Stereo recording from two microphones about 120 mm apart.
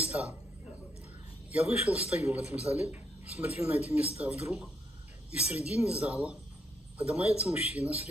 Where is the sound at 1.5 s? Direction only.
10° right (ahead or behind).